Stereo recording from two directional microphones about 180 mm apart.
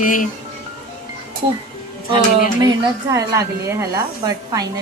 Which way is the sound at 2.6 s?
20° right (ahead or behind).